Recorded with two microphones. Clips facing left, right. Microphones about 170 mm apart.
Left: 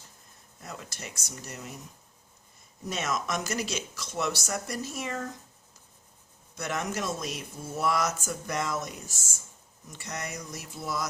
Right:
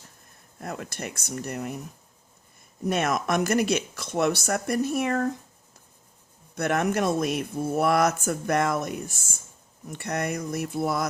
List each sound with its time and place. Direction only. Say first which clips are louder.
0.6 s speech: right 8 dB; 60° right (ahead or behind)
2.8 s speech: right 7 dB; 60° right (ahead or behind)
6.6 s speech: right 8 dB; 60° right (ahead or behind)